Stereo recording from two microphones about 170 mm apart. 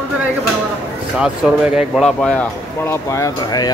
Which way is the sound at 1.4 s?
5° right (ahead or behind).